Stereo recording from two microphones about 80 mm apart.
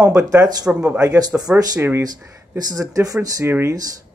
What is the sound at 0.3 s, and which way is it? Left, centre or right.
Speech, right.